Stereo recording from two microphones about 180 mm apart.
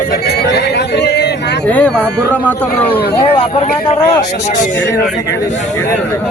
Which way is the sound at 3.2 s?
35° left (ahead or behind).